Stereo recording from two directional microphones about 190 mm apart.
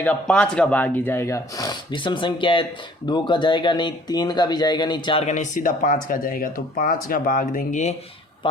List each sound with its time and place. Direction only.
0.0 s speech: 5° left (ahead or behind); by 5.2 s 25° left (ahead or behind)
5.2 s speech: 40° left (ahead or behind)